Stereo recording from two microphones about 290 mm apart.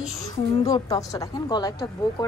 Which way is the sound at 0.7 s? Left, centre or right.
Centre.